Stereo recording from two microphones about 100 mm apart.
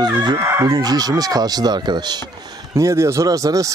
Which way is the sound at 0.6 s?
40° right (ahead or behind).